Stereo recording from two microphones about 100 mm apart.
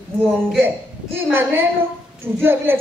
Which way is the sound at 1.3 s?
20° right (ahead or behind).